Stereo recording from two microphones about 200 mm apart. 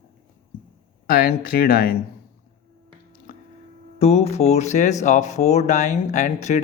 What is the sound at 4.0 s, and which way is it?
Speech, 30° left (ahead or behind).